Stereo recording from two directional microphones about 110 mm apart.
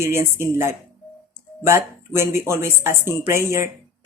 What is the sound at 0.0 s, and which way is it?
Speech, 25° right (ahead or behind).